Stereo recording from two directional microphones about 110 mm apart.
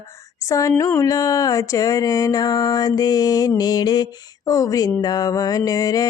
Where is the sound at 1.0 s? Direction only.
30° left (ahead or behind).